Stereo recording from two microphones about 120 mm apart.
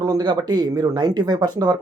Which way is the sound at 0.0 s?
35° right (ahead or behind).